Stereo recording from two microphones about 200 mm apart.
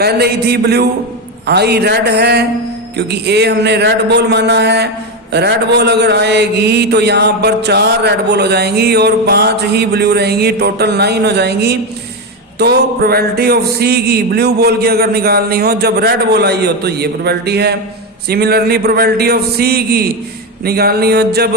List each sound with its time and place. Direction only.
0.0 s speech: 55° right (ahead or behind)